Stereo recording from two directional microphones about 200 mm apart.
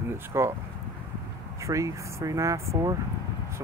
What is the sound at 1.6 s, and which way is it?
Speech, 15° right (ahead or behind).